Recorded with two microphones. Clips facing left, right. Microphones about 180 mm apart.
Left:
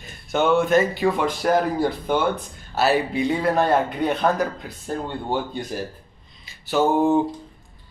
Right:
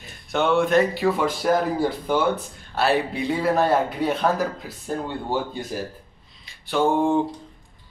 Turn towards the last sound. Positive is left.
turn(degrees=5)  # may be behind; listen again after turning